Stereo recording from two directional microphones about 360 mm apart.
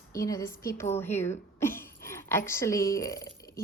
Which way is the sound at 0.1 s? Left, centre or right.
Centre.